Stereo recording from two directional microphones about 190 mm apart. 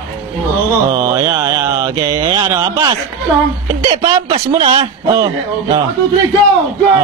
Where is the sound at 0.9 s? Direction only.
15° right (ahead or behind).